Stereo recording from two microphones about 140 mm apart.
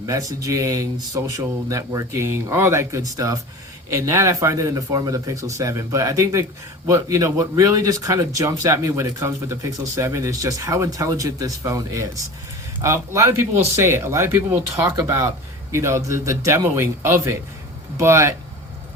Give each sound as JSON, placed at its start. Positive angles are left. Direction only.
{"t": 0.0, "sound": "speech", "side_deg": -25}